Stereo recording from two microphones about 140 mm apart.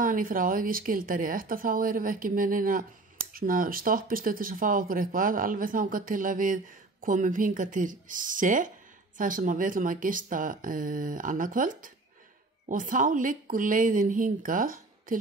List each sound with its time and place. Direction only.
0.0 s speech: 80° right